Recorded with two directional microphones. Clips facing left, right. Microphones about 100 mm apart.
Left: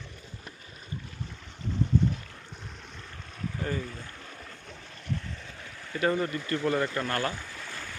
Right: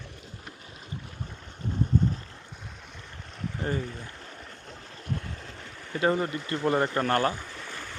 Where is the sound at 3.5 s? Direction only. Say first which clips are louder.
Right 3 dB; 25° right (ahead or behind).